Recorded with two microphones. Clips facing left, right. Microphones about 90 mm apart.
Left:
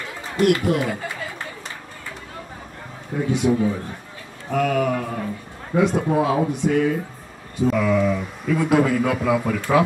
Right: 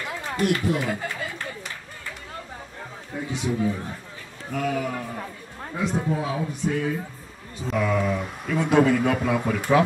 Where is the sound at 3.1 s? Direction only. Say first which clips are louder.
Left 7 dB; 70° left (ahead or behind).